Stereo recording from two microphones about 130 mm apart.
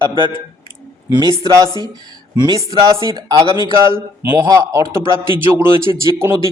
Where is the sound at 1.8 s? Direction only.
30° right (ahead or behind).